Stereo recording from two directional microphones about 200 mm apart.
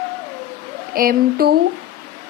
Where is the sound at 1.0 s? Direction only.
50° right (ahead or behind).